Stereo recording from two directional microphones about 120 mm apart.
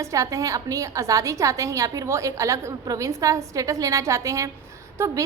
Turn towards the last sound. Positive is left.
turn(degrees=-20)  # may be behind; listen again after turning